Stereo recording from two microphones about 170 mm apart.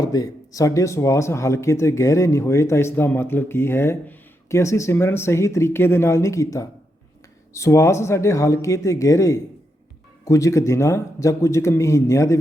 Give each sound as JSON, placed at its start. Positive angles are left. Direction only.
{"t": 0.0, "sound": "speech", "side_deg": 20}